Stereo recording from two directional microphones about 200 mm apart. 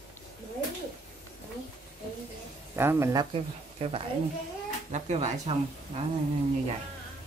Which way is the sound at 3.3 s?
30° right (ahead or behind).